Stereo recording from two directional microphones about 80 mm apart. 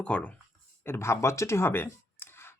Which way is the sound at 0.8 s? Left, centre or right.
Left.